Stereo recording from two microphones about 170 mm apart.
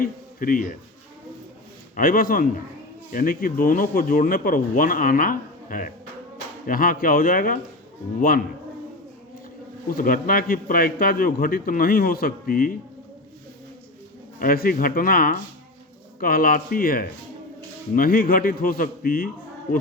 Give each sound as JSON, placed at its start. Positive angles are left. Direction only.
{"t": 0.0, "sound": "speech", "side_deg": 55}
{"t": 2.0, "sound": "speech", "side_deg": 55}
{"t": 9.9, "sound": "speech", "side_deg": 55}
{"t": 14.3, "sound": "speech", "side_deg": 60}